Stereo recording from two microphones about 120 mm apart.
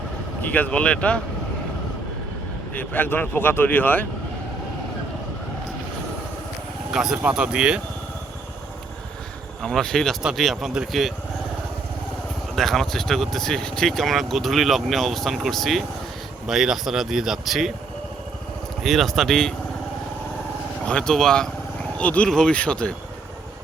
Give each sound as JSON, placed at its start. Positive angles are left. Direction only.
{"t": 0.4, "sound": "speech", "side_deg": 15}
{"t": 2.7, "sound": "speech", "side_deg": 15}
{"t": 6.9, "sound": "speech", "side_deg": -5}
{"t": 9.6, "sound": "speech", "side_deg": 5}
{"t": 12.5, "sound": "speech", "side_deg": 0}
{"t": 18.8, "sound": "speech", "side_deg": 0}
{"t": 20.8, "sound": "speech", "side_deg": 10}